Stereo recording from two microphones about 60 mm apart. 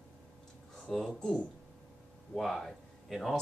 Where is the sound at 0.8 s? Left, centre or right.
Centre.